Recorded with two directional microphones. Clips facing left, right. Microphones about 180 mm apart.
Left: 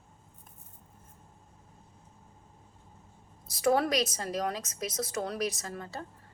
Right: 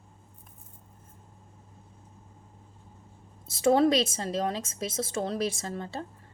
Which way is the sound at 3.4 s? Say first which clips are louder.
Right 5 dB; 25° right (ahead or behind).